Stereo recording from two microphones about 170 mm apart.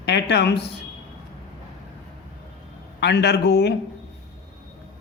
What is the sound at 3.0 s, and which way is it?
Speech, 80° left.